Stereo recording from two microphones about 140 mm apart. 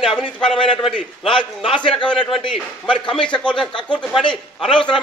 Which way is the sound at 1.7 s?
35° left (ahead or behind).